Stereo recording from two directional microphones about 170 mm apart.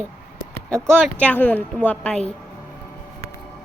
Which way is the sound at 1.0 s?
5° left (ahead or behind).